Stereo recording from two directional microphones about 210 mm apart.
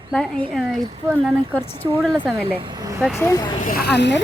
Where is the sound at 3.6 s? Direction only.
45° left (ahead or behind).